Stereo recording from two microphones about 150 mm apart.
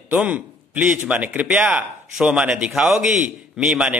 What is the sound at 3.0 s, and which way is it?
Speech, 55° right (ahead or behind).